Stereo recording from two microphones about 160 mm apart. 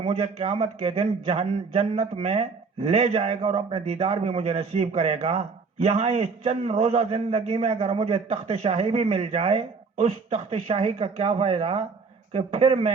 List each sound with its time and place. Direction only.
0.0 s a man's voice: 35° right (ahead or behind)